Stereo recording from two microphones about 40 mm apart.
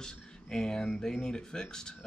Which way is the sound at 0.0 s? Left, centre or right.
Centre.